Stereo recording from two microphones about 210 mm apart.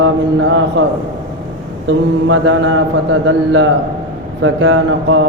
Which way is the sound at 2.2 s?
65° right (ahead or behind).